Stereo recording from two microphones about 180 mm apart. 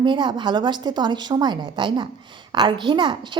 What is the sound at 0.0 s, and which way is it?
A woman's voice, 25° right (ahead or behind).